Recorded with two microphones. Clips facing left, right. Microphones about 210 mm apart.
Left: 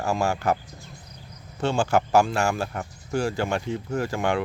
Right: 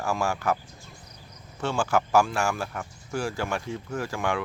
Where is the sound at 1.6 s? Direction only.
25° left (ahead or behind).